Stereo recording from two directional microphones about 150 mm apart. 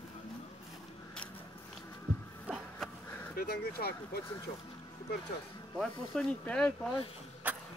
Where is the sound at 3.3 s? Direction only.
90° left.